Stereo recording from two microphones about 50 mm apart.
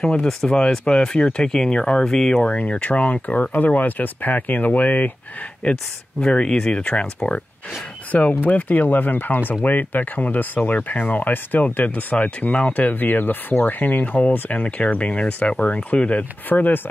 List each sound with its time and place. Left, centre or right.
0.0 s speech: centre
8.1 s speech: left
12.7 s speech: left